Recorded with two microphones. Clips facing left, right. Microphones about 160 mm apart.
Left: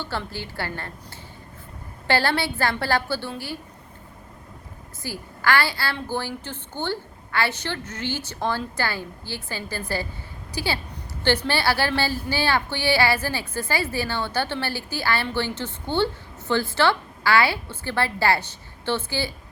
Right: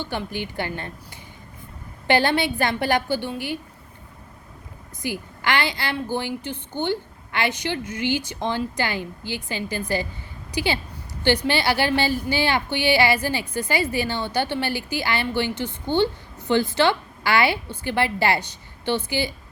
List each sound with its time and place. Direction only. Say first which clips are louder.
0.0 s a woman's voice: right 2 dB; 15° right (ahead or behind)
2.0 s a woman's voice: right 3 dB; 20° right (ahead or behind)
5.0 s a woman's voice: left 1 dB; 20° right (ahead or behind)